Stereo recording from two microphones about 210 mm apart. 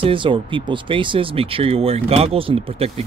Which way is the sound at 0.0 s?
25° right (ahead or behind).